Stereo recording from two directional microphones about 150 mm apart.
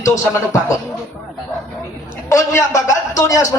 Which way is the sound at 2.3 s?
20° left (ahead or behind).